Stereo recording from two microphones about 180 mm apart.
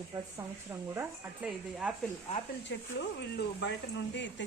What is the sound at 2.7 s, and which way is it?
Speech, 75° left (ahead or behind).